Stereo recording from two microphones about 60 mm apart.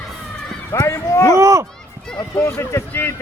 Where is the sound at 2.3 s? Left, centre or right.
Left.